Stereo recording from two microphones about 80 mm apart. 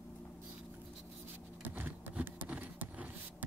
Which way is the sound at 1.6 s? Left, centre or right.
Right.